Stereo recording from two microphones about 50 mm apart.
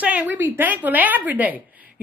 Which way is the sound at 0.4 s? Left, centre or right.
Right.